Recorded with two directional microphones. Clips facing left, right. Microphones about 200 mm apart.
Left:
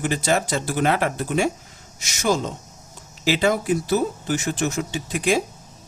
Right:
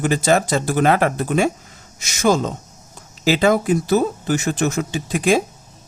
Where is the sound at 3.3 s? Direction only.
50° right (ahead or behind).